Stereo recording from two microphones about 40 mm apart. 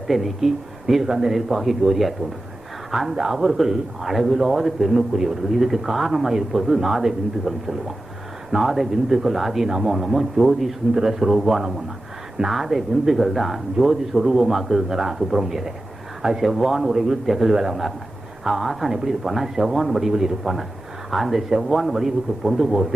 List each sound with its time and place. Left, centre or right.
0.1 s a man's voice: centre
9.6 s speech: centre
9.9 s a man's voice: centre
16.5 s a man's voice: centre